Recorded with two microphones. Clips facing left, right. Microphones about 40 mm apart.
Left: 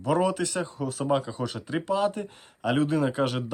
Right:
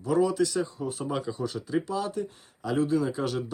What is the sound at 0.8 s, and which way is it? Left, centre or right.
Speech, left.